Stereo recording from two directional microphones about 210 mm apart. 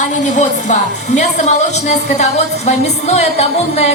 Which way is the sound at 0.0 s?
35° left (ahead or behind).